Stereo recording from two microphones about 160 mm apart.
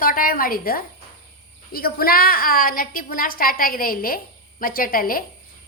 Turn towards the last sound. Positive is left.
turn(degrees=65)  # may be behind; listen again after turning